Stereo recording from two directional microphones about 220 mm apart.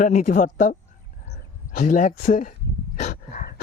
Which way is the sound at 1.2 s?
35° left (ahead or behind).